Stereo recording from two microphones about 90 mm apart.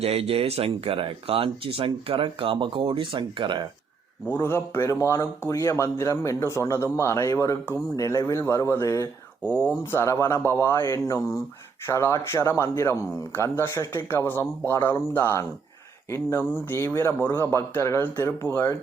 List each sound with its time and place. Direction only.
0.0 s speech: 90° right; by 3.7 s 60° right (ahead or behind)
4.3 s speech: 25° left (ahead or behind)